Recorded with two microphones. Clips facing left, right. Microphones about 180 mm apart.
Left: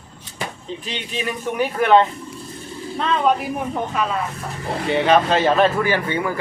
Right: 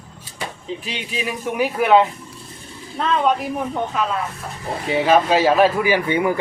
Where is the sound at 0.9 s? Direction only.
5° right (ahead or behind).